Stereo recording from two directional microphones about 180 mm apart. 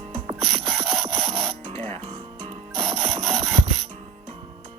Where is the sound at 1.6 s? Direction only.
30° right (ahead or behind).